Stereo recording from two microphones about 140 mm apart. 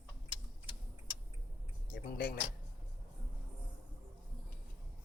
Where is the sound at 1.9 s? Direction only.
90° left.